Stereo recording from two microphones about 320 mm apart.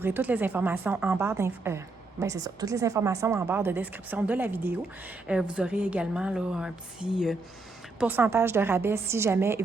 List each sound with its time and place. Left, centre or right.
0.0 s a woman's voice: centre